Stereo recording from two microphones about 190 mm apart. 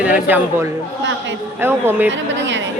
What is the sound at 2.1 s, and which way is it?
Speech, 75° right (ahead or behind).